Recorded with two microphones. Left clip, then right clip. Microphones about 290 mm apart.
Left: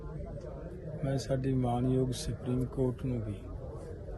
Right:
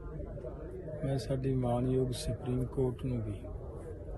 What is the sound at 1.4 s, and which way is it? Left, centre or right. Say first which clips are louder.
Speech: right 3 dB; centre.